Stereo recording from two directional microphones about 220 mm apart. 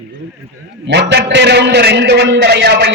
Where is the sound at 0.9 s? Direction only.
50° right (ahead or behind).